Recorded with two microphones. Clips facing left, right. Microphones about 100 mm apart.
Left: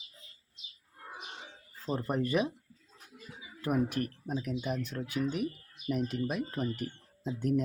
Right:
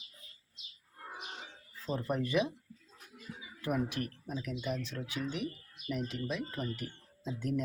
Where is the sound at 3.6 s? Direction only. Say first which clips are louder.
Left 4 dB; 40° left (ahead or behind).